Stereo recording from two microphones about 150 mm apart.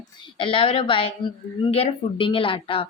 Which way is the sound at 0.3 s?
35° left (ahead or behind).